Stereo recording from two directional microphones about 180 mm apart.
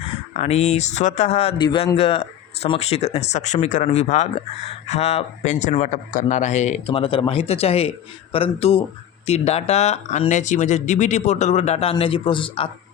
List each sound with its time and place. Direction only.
0.3 s speech: 35° left (ahead or behind)